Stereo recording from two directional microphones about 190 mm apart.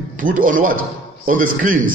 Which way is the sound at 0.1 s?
45° right (ahead or behind).